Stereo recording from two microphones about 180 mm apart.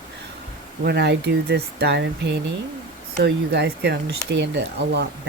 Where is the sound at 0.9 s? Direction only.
65° right (ahead or behind).